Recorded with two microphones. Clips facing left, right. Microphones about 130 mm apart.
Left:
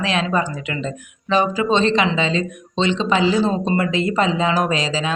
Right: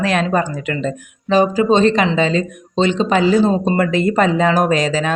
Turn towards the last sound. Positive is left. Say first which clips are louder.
# right 5 dB
turn(degrees=-50)  # may be behind; listen again after turning